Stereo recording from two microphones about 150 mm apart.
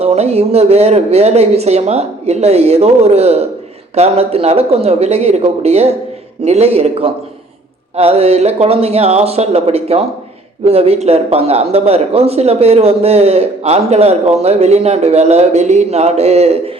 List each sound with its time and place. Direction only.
0.0 s speech: 45° right (ahead or behind)